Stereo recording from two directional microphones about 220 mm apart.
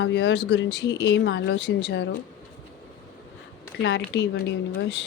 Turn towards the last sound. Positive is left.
turn(degrees=50)  # may be behind; listen again after turning